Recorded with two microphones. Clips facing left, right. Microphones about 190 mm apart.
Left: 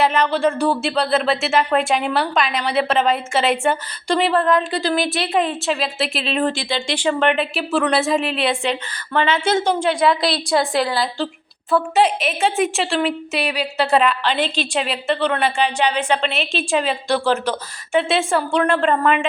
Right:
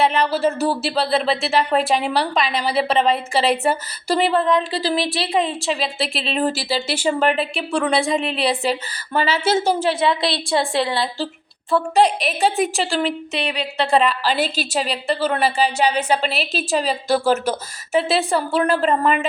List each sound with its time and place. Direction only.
0.0 s speech: centre (ahead or behind)
10.8 s a woman's voice: 25° right (ahead or behind)
11.7 s speech: centre (ahead or behind)
15.6 s speech: 40° right (ahead or behind)
16.2 s speech: 5° right (ahead or behind)